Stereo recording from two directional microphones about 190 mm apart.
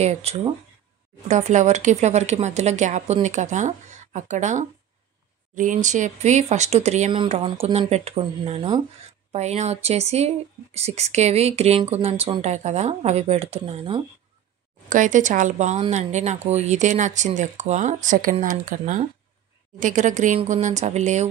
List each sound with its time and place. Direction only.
0.0 s speech: 35° right (ahead or behind)
14.9 s speech: 40° right (ahead or behind)